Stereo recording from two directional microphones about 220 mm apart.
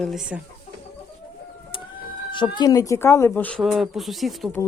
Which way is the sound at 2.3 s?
20° left (ahead or behind).